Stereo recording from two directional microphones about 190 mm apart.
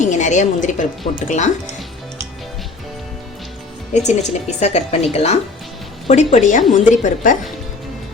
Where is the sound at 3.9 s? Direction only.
40° left (ahead or behind).